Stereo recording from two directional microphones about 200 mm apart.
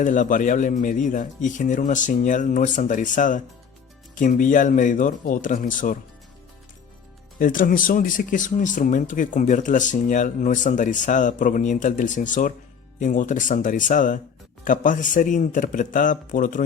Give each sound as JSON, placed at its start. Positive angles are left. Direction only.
{"t": 0.0, "sound": "speech", "side_deg": 40}
{"t": 7.3, "sound": "speech", "side_deg": 45}